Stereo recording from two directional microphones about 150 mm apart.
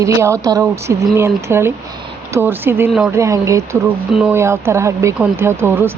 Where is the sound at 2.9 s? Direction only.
5° right (ahead or behind).